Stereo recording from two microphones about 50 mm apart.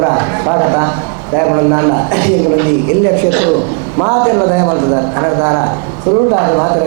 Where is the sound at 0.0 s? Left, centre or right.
Right.